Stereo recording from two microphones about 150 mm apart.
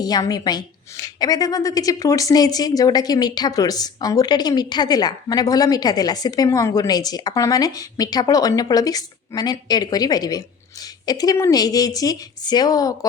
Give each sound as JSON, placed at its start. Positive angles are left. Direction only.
{"t": 0.0, "sound": "a woman's voice", "side_deg": 25}